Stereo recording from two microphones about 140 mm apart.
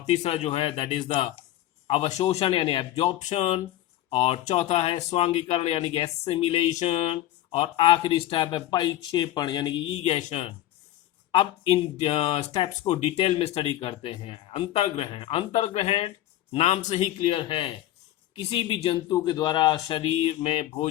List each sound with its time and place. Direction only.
0.1 s speech: 55° left (ahead or behind)
3.2 s speech: 50° left (ahead or behind)
11.3 s speech: 40° left (ahead or behind)